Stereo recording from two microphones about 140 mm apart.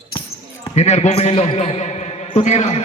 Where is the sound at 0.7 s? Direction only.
50° left (ahead or behind).